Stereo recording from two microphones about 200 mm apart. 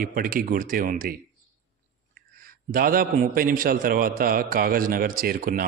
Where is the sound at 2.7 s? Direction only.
45° right (ahead or behind).